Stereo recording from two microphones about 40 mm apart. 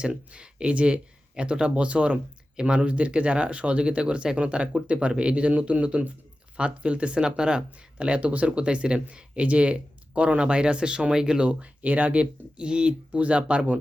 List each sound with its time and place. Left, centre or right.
0.0 s speech: right
8.5 s speech: right
11.4 s speech: right